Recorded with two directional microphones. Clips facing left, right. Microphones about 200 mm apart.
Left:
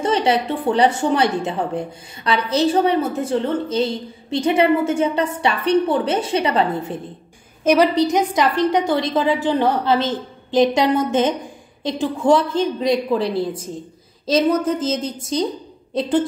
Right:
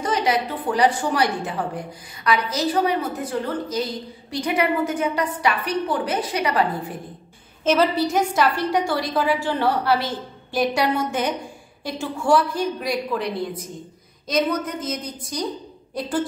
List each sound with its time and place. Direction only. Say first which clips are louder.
0.0 s a woman's voice: left 4 dB; 30° left (ahead or behind)
14.7 s a woman's voice: left 8 dB; 25° left (ahead or behind)